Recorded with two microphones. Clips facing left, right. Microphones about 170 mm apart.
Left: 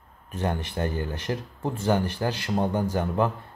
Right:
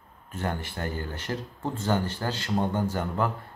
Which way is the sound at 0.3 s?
15° left (ahead or behind).